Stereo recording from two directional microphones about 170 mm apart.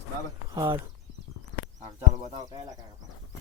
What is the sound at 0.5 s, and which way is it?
Speech, 20° right (ahead or behind).